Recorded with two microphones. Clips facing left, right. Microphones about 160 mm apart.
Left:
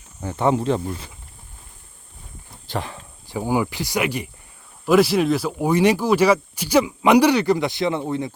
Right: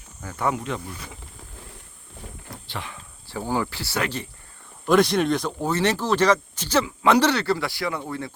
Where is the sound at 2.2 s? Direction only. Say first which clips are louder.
Right 8 dB; 90° right.